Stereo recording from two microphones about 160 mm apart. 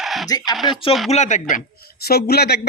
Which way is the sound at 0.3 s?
25° left (ahead or behind).